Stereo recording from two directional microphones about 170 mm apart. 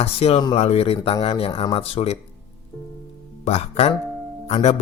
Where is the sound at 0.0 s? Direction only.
35° left (ahead or behind).